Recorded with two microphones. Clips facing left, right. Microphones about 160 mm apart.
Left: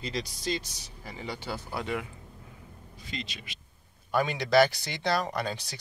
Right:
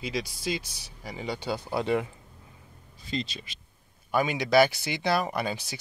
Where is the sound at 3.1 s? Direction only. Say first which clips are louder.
Right 7 dB; 35° right (ahead or behind).